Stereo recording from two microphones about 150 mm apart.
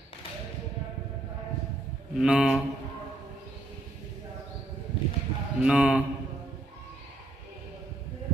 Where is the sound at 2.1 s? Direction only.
5° right (ahead or behind).